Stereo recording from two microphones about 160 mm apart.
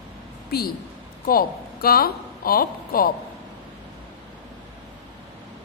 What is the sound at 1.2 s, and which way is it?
Speech, 65° left (ahead or behind).